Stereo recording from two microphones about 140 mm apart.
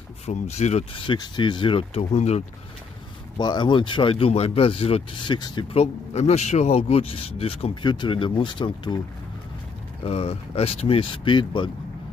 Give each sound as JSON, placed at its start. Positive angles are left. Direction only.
{"t": 0.3, "sound": "speech", "side_deg": 55}
{"t": 1.0, "sound": "speech", "side_deg": 30}
{"t": 2.1, "sound": "speech", "side_deg": 50}
{"t": 3.3, "sound": "speech", "side_deg": 30}
{"t": 10.0, "sound": "speech", "side_deg": 45}